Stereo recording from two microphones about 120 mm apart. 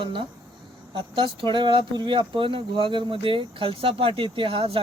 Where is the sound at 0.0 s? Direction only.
45° right (ahead or behind).